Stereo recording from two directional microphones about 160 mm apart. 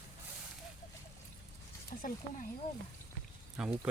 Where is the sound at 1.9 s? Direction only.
60° left (ahead or behind).